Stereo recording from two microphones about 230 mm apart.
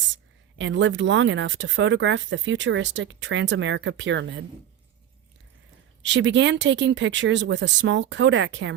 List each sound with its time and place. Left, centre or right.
0.6 s speech: right
6.0 s speech: right